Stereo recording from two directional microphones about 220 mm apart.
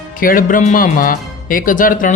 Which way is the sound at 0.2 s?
40° left (ahead or behind).